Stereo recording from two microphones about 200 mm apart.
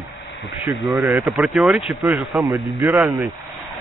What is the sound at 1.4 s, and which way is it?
Speech, centre (ahead or behind).